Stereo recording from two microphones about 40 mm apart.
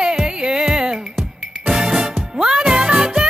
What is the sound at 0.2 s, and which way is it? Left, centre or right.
Music, right.